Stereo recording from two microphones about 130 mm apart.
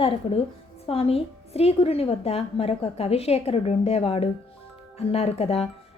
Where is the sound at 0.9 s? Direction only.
50° left (ahead or behind).